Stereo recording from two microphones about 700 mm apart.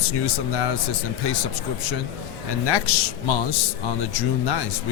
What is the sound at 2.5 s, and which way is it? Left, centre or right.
Speech, left.